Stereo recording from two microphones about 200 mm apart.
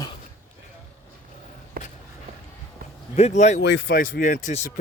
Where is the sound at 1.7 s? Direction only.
50° right (ahead or behind).